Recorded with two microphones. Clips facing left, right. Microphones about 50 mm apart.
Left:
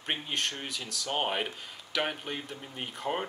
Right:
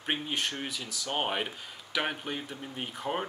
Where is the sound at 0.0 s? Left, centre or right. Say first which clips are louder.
Right 1 dB; centre.